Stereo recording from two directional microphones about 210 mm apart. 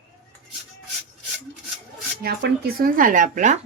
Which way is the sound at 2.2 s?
45° right (ahead or behind).